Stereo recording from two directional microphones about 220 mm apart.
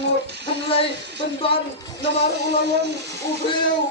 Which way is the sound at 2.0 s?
50° right (ahead or behind).